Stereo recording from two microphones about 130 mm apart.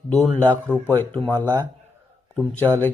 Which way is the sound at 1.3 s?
20° right (ahead or behind).